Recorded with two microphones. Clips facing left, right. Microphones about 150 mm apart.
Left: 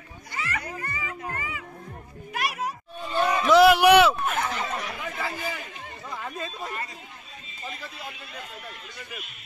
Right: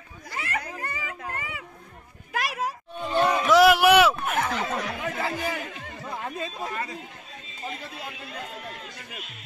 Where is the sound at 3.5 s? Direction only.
5° right (ahead or behind).